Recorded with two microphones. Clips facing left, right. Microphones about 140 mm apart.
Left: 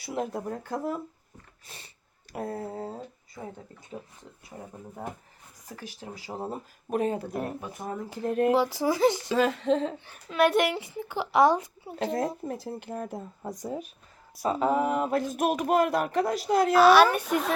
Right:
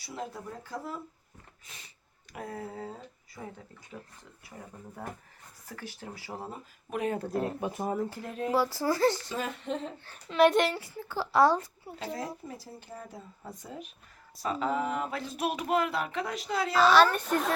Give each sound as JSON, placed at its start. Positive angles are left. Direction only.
{"t": 0.0, "sound": "speech", "side_deg": 60}
{"t": 1.6, "sound": "a woman's voice", "side_deg": 30}
{"t": 6.5, "sound": "speech", "side_deg": 35}
{"t": 7.2, "sound": "a woman's voice", "side_deg": 10}
{"t": 7.6, "sound": "speech", "side_deg": -20}
{"t": 8.3, "sound": "speech", "side_deg": 60}
{"t": 8.5, "sound": "a woman's voice", "side_deg": 15}
{"t": 9.3, "sound": "speech", "side_deg": 90}
{"t": 10.2, "sound": "speech", "side_deg": 0}
{"t": 10.7, "sound": "a woman's voice", "side_deg": 20}
{"t": 12.5, "sound": "speech", "side_deg": 60}
{"t": 16.7, "sound": "a woman's voice", "side_deg": 10}